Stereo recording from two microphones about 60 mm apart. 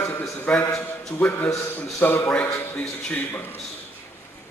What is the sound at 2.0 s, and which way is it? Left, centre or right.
Speech, left.